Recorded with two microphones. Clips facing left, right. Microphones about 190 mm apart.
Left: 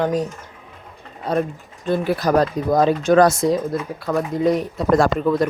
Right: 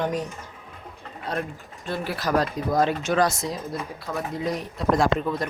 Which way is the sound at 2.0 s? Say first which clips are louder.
Left 5 dB; 50° left (ahead or behind).